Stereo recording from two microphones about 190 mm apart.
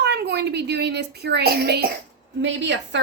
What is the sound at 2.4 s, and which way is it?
Speech, 70° right (ahead or behind).